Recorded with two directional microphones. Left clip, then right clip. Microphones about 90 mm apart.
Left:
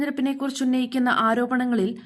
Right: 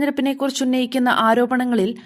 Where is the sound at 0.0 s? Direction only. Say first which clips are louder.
Right 5 dB; 40° right (ahead or behind).